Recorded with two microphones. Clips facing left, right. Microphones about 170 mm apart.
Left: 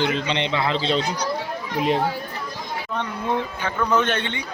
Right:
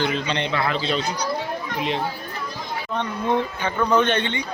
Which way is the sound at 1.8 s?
45° left (ahead or behind).